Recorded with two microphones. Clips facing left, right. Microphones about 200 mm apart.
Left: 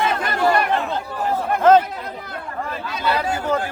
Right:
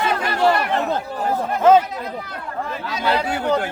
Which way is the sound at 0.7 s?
40° right (ahead or behind).